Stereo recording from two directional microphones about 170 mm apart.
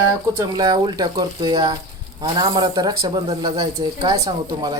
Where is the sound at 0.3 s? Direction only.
25° right (ahead or behind).